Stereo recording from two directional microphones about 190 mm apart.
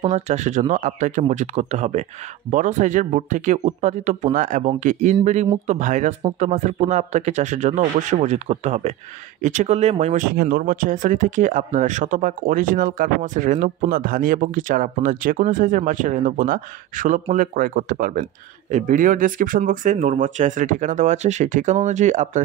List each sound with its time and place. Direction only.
0.0 s speech: 35° right (ahead or behind)
10.3 s speech: 55° right (ahead or behind)